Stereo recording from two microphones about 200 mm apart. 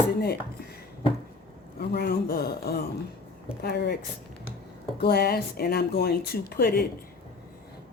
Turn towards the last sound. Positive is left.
turn(degrees=50)  # may be behind; listen again after turning